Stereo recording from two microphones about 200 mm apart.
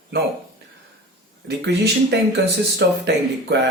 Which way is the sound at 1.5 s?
55° right (ahead or behind).